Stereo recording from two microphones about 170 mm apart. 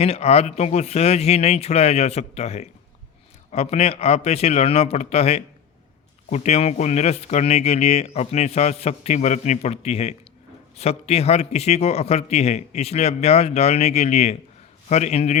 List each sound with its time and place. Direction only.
0.0 s speech: 35° left (ahead or behind)